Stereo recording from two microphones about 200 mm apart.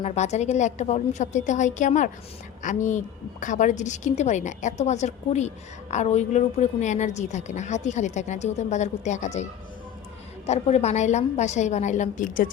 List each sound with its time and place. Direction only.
0.0 s a woman's voice: 35° left (ahead or behind)